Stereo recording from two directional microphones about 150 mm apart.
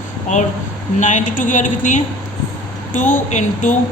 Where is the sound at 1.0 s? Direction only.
60° left (ahead or behind).